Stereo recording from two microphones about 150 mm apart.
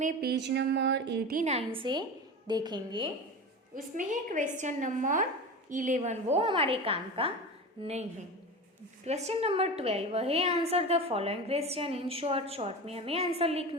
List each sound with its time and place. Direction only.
0.0 s a sound: 90° right
1.5 s a woman's voice: 45° right (ahead or behind)
1.8 s a woman's voice: 30° right (ahead or behind)
3.9 s a woman's voice: 60° right (ahead or behind)
9.0 s a woman's voice: 45° right (ahead or behind)